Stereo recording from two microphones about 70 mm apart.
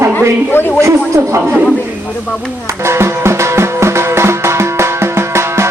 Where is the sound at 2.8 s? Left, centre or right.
Right.